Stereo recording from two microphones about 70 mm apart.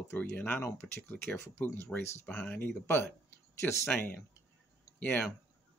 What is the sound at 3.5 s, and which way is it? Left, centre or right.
Speech, left.